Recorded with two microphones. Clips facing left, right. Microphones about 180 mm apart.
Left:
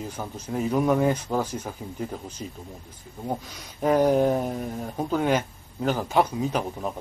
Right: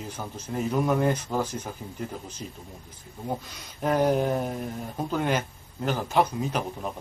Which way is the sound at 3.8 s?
Centre (ahead or behind).